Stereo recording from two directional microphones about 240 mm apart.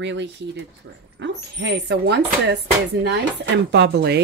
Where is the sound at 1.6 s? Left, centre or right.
Right.